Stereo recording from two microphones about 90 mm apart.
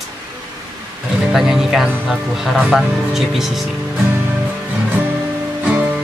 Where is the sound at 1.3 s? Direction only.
5° right (ahead or behind).